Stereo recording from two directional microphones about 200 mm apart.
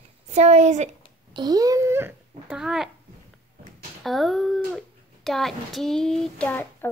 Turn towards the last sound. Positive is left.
turn(degrees=5)  # may be behind; listen again after turning